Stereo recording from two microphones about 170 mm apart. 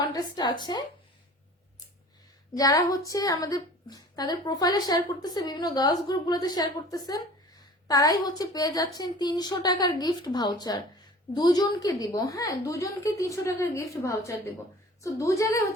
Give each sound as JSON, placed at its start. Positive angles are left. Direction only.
{"t": 0.1, "sound": "a woman's voice", "side_deg": 25}
{"t": 2.6, "sound": "a woman's voice", "side_deg": 20}